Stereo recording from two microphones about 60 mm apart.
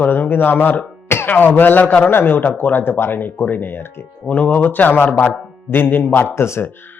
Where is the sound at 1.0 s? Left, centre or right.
Left.